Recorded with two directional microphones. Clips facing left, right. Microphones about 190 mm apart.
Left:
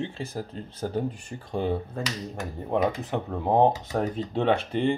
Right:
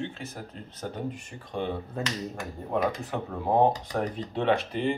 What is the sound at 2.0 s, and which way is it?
Speech, centre (ahead or behind).